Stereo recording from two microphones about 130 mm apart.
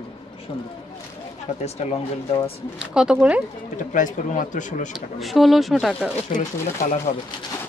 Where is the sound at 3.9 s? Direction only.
85° left.